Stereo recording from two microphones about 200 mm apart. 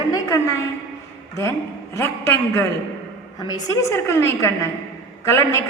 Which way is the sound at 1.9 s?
10° left (ahead or behind).